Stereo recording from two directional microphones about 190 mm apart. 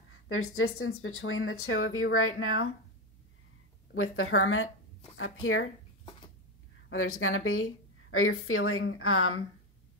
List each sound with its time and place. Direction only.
0.3 s speech: 90° left
3.9 s speech: 90° left
7.2 s speech: 90° left